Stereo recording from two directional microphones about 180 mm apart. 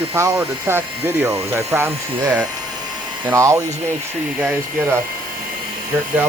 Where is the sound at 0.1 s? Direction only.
15° right (ahead or behind).